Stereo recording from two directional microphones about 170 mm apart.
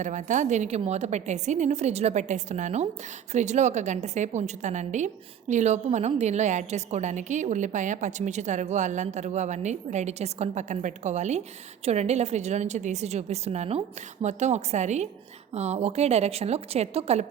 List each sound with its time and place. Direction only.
0.0 s a woman's voice: 45° right (ahead or behind)